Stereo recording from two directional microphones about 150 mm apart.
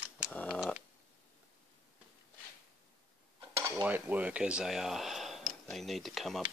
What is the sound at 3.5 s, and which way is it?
Cutlery, 20° right (ahead or behind).